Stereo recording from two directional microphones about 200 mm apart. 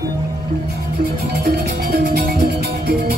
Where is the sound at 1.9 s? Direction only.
45° right (ahead or behind).